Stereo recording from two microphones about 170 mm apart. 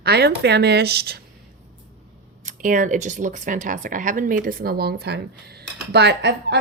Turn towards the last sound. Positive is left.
turn(degrees=-80)